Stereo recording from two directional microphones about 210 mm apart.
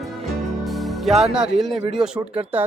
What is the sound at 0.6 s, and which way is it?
Speech, centre (ahead or behind).